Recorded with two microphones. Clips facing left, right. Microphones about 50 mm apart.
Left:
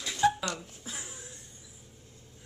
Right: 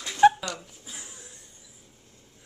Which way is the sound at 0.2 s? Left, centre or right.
Right.